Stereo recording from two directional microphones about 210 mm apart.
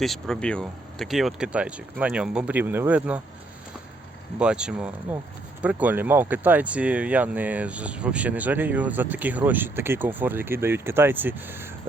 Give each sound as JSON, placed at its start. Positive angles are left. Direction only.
{"t": 0.0, "sound": "speech", "side_deg": 0}
{"t": 4.4, "sound": "speech", "side_deg": -5}